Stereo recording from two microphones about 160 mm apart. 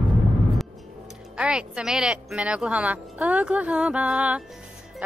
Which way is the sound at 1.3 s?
5° right (ahead or behind).